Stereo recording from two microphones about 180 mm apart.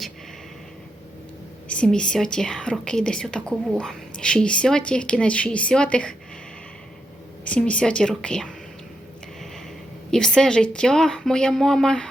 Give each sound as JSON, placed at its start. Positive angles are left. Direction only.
{"t": 1.6, "sound": "a woman's voice", "side_deg": 5}
{"t": 7.4, "sound": "a woman's voice", "side_deg": 5}
{"t": 10.1, "sound": "a woman's voice", "side_deg": 5}